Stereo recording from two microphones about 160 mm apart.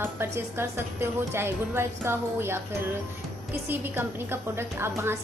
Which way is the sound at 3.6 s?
15° right (ahead or behind).